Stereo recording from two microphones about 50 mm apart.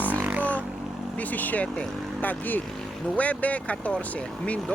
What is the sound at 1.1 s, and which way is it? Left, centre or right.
Speech, left.